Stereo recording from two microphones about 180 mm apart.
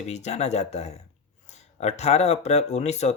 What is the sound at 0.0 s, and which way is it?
Speech, 40° left (ahead or behind).